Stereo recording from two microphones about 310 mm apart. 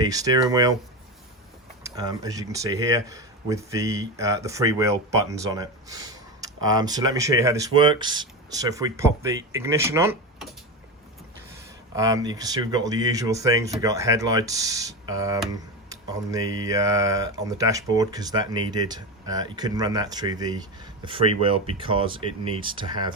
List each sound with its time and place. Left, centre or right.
0.0 s speech: centre
1.8 s speech: centre
11.9 s speech: centre